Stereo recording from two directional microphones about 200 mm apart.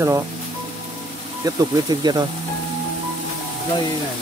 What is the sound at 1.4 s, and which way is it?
Speech, 20° right (ahead or behind).